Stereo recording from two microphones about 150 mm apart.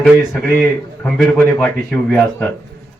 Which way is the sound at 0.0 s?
5° left (ahead or behind).